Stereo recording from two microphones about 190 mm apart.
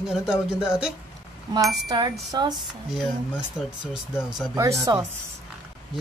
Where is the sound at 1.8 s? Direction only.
20° right (ahead or behind).